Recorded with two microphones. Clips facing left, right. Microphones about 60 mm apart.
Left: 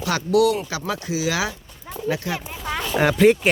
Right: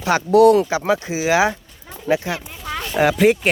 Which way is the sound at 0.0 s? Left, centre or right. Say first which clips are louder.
Right 6 dB; right.